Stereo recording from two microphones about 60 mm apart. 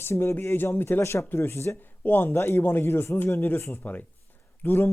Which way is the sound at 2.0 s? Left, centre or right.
Left.